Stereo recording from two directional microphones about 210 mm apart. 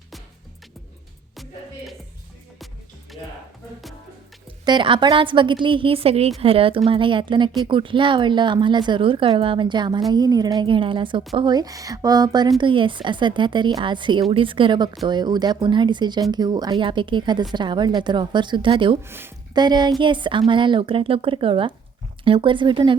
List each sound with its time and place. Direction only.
1.4 s music: centre (ahead or behind)
4.6 s a woman's voice: 20° right (ahead or behind)
19.0 s a woman's voice: 10° right (ahead or behind)